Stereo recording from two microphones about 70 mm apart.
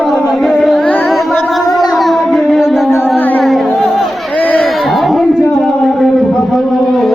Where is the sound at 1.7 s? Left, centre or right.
Left.